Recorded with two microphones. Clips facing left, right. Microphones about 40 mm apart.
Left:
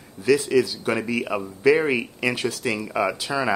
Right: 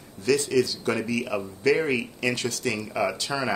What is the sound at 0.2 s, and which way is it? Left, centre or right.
Speech, centre.